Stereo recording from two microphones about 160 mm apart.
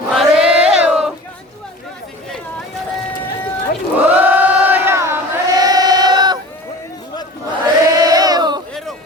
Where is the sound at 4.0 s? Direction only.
10° right (ahead or behind); by 6.4 s 25° right (ahead or behind).